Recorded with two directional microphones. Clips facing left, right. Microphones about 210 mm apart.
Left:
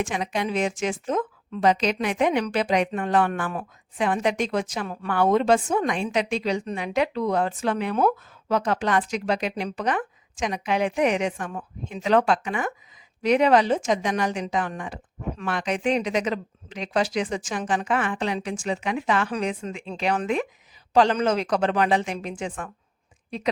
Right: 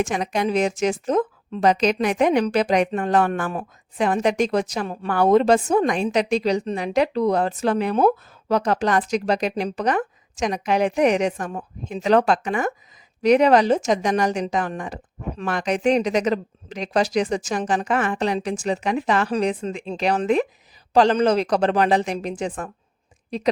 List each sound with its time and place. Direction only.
0.0 s speech: 45° right (ahead or behind)